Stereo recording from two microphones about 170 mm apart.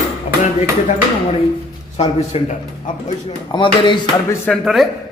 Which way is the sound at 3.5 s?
30° left (ahead or behind).